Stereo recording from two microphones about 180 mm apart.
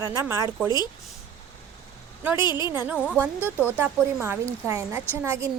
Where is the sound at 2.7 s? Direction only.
10° right (ahead or behind).